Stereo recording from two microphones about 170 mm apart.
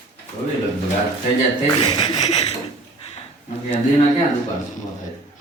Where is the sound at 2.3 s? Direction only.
40° left (ahead or behind).